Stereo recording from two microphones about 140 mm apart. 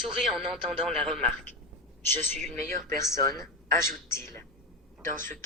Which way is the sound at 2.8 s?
20° left (ahead or behind).